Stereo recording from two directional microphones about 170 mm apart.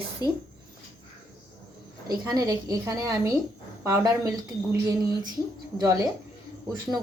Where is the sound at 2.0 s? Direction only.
25° right (ahead or behind).